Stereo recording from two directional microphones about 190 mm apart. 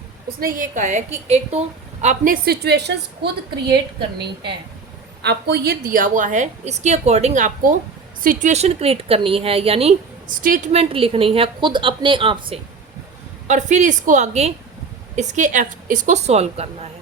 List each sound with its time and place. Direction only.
0.3 s a woman's voice: 45° right (ahead or behind)
5.2 s a woman's voice: 60° right (ahead or behind); by 9.9 s 30° right (ahead or behind)
10.4 s a woman's voice: 45° right (ahead or behind)
10.7 s a woman's voice: 30° right (ahead or behind)
13.5 s a woman's voice: 40° right (ahead or behind)